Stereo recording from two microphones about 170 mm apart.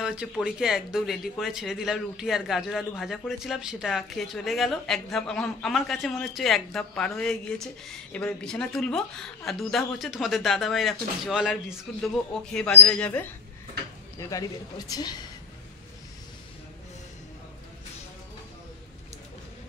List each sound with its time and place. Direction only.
0.0 s speech: 5° right (ahead or behind)
14.2 s speech: 20° left (ahead or behind)